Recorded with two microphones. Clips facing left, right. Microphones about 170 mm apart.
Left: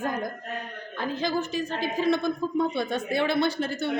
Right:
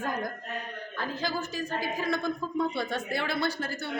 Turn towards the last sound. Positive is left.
turn(degrees=20)  # may be behind; listen again after turning